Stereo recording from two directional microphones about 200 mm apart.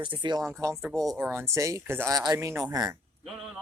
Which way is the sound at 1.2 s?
10° right (ahead or behind).